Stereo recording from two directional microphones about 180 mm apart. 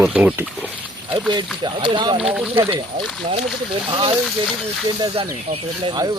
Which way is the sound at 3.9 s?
30° right (ahead or behind).